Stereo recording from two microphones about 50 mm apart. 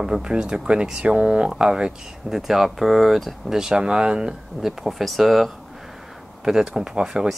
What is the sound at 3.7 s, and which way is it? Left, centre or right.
Speech, centre.